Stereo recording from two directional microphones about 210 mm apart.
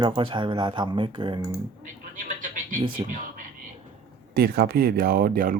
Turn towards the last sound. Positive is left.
turn(degrees=-40)  # may be behind; listen again after turning